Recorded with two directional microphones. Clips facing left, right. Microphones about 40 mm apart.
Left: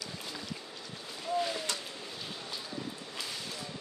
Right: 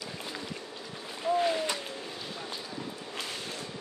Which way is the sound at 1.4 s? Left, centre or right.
Right.